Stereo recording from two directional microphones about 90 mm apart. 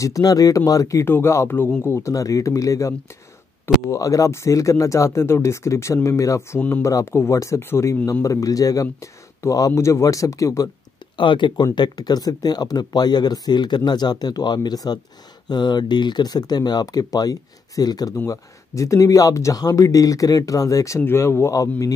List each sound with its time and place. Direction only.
0.0 s speech: 40° left (ahead or behind)
1.0 s speech: 25° left (ahead or behind)
8.1 s speech: 40° left (ahead or behind)
11.1 s speech: 65° left (ahead or behind); by 18.1 s 45° left (ahead or behind)
18.1 s speech: 35° left (ahead or behind)